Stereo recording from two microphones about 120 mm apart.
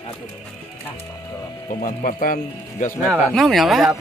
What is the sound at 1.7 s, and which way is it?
Speech, 90° left.